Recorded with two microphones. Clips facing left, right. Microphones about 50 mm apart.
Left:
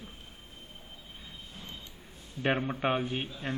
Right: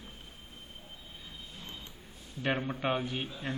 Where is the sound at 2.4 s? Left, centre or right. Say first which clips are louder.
Left 3 dB; left.